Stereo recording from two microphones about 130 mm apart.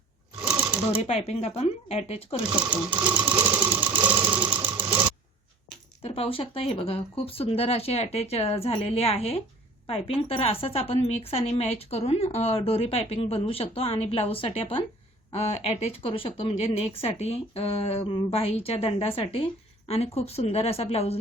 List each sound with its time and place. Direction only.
0.4 s sewing machine: 10° right (ahead or behind)
1.0 s speech: 55° left (ahead or behind)
3.7 s sewing machine: 15° right (ahead or behind)
6.0 s a woman's voice: 50° left (ahead or behind)